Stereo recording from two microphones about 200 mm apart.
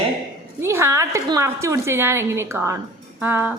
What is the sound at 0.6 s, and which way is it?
A woman's voice, 10° right (ahead or behind).